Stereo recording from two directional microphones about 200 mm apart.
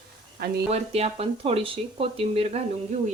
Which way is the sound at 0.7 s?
30° right (ahead or behind).